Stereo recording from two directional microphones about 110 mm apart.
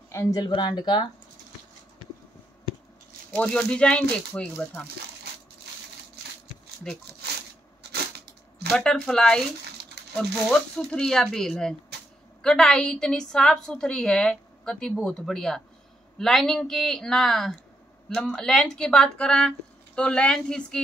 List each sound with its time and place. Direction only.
0.1 s speech: 30° left (ahead or behind)
3.3 s speech: 5° left (ahead or behind)
8.7 s a woman's voice: 5° left (ahead or behind)